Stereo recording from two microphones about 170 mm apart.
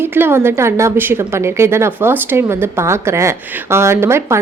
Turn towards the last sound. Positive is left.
turn(degrees=-15)  # may be behind; listen again after turning